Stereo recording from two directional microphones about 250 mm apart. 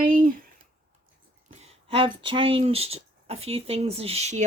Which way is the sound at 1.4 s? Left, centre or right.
Right.